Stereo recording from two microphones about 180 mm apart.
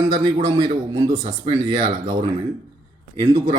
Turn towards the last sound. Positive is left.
turn(degrees=-20)  # may be behind; listen again after turning